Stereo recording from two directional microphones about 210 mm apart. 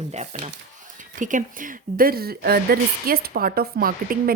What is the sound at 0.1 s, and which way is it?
A woman's voice, 30° right (ahead or behind).